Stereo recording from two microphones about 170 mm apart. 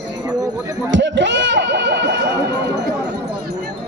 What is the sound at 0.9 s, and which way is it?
Chatter, 90° right.